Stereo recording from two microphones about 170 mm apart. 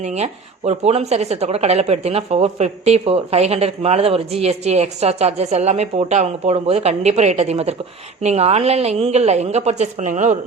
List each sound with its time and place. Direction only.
0.0 s speech: 40° right (ahead or behind)